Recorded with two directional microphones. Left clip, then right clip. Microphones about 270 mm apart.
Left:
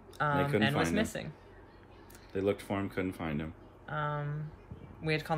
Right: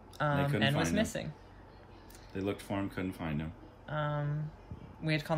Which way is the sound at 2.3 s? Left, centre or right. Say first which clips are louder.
Left 4 dB; centre.